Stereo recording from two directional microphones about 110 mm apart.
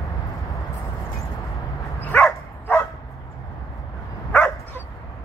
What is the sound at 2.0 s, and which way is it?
Dog, 15° left (ahead or behind).